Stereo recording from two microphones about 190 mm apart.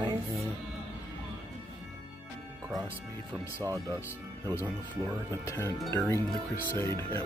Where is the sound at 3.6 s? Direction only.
15° right (ahead or behind).